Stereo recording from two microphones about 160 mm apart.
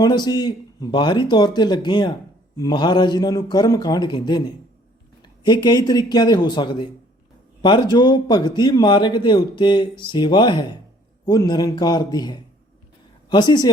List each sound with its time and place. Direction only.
0.0 s speech: 25° left (ahead or behind)